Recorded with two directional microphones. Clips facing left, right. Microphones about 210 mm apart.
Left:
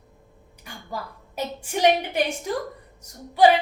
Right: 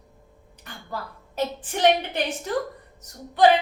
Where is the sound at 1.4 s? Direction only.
10° left (ahead or behind).